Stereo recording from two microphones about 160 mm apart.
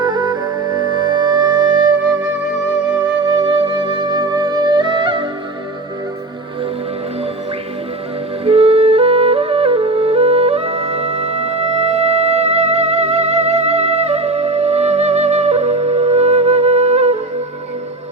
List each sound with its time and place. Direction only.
0.0 s music: 25° right (ahead or behind)
3.2 s music: 30° right (ahead or behind)
8.4 s music: 40° right (ahead or behind)